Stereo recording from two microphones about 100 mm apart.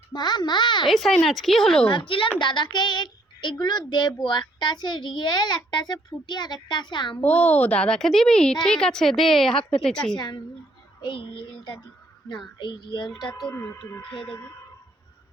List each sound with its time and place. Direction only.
0.1 s a child's voice: 45° left (ahead or behind)
0.9 s a woman's voice: centre (ahead or behind)
1.9 s a woman's voice: 55° left (ahead or behind)
7.2 s a woman's voice: 15° left (ahead or behind)
10.2 s a child's voice: 45° left (ahead or behind)
11.0 s a child's voice: 55° left (ahead or behind)
13.5 s speech: 30° left (ahead or behind)